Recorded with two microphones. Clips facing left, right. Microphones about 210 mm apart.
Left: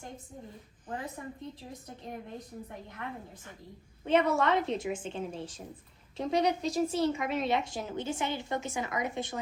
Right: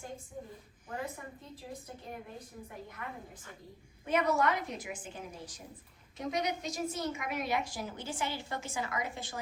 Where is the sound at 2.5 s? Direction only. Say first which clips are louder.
Left 4 dB; 45° left (ahead or behind).